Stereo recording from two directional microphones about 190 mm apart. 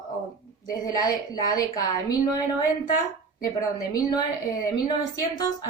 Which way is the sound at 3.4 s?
20° left (ahead or behind).